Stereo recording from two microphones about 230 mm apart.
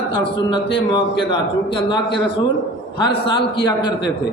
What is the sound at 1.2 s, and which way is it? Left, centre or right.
Speech, left.